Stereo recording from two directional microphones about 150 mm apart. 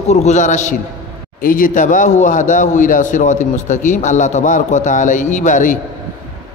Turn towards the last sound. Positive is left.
turn(degrees=60)  # may be behind; listen again after turning